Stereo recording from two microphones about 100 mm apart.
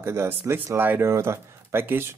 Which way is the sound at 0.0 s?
25° right (ahead or behind).